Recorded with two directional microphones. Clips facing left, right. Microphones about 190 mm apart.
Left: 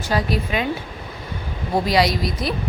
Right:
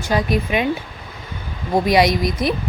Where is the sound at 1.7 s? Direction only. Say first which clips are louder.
Right 3 dB; 20° right (ahead or behind).